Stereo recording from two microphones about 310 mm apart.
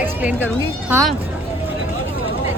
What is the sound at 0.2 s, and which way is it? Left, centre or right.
Speech, centre.